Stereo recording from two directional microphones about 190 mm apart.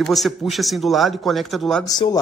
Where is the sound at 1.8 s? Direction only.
20° left (ahead or behind).